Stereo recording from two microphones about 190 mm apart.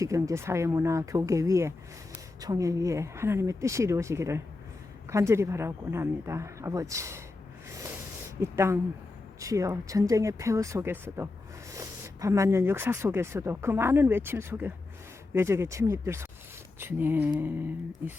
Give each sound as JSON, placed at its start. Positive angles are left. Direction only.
{"t": 0.0, "sound": "speech", "side_deg": -15}
{"t": 8.4, "sound": "speech", "side_deg": -15}